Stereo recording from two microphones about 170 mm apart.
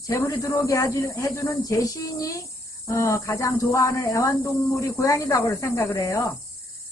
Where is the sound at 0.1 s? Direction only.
15° left (ahead or behind).